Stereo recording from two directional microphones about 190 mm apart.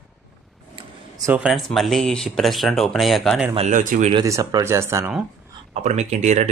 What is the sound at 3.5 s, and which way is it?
Speech, 40° right (ahead or behind).